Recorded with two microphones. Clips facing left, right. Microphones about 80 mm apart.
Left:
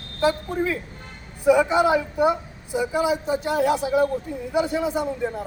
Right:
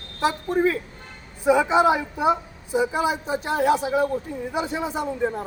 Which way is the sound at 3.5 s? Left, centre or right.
Right.